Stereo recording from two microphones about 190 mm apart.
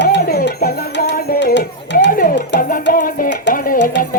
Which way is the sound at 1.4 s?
70° left (ahead or behind).